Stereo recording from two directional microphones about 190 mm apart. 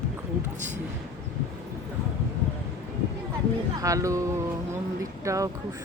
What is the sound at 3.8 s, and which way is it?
Speech, 15° right (ahead or behind).